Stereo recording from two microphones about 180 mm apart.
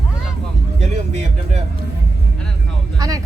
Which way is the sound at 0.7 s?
40° right (ahead or behind).